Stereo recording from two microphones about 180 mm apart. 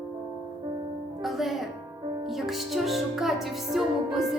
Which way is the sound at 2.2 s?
Centre (ahead or behind).